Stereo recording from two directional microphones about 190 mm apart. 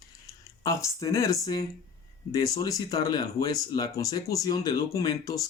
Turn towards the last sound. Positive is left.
turn(degrees=20)  # may be behind; listen again after turning